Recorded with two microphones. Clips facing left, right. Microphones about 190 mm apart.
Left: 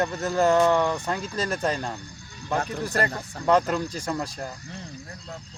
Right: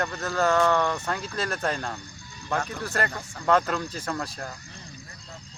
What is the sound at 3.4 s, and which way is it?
Speech, 15° left (ahead or behind).